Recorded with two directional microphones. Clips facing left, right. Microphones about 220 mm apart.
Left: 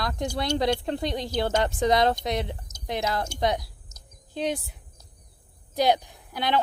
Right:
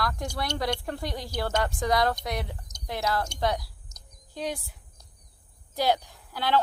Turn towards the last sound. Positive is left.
turn(degrees=20)  # may be behind; listen again after turning